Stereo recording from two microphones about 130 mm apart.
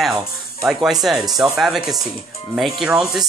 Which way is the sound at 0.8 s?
Centre (ahead or behind).